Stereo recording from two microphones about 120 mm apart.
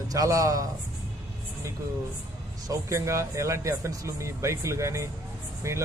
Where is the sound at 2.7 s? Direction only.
25° right (ahead or behind).